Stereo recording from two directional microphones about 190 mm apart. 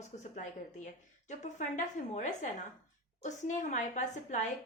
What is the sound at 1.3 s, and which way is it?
A woman's voice, 40° left (ahead or behind).